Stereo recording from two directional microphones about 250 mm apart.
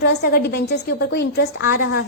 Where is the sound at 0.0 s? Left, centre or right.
Left.